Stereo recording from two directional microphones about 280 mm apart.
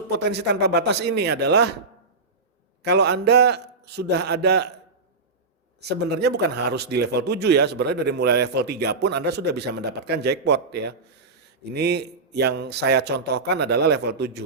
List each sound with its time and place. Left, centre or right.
0.2 s speech: right
2.8 s speech: right
5.8 s speech: right